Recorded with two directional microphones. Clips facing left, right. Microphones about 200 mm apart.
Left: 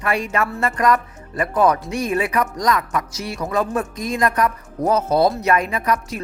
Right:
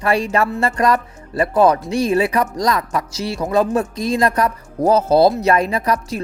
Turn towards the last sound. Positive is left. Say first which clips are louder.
# right 2 dB
turn(degrees=-35)  # may be behind; listen again after turning